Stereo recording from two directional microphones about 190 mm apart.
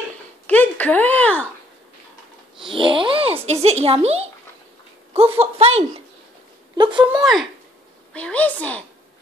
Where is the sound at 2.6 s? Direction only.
25° right (ahead or behind).